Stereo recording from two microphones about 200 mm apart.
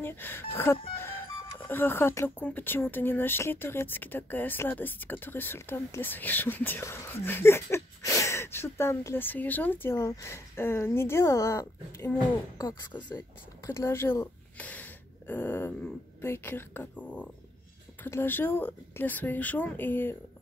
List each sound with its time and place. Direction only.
0.0 s speech: 10° left (ahead or behind)